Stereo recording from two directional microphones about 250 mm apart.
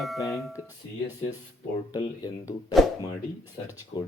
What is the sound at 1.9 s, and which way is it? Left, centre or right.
Speech, centre.